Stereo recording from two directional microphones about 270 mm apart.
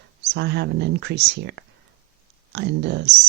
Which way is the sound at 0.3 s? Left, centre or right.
Right.